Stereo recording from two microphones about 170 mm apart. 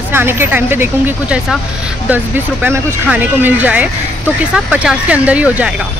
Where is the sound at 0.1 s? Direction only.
15° right (ahead or behind).